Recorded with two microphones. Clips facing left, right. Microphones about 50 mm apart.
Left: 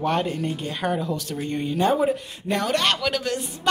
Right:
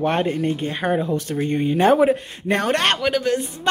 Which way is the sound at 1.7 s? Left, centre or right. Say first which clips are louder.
Right 5 dB; right.